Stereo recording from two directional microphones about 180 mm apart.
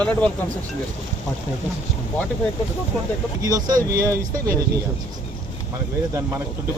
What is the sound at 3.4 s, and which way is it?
Speech, 20° right (ahead or behind).